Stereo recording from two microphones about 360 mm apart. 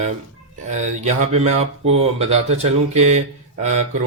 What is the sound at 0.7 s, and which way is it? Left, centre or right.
Speech, centre.